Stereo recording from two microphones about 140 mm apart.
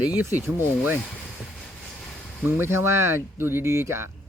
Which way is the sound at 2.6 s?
15° right (ahead or behind).